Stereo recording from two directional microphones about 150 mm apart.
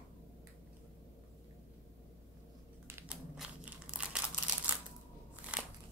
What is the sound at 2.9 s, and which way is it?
Typing, 15° right (ahead or behind).